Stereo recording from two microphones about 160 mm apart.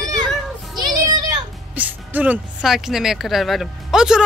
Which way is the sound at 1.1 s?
25° right (ahead or behind).